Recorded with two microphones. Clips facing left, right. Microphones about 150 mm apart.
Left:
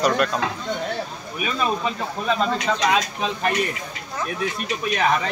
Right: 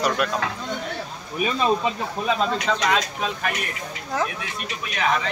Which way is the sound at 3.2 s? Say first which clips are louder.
Left 3 dB; 30° left (ahead or behind).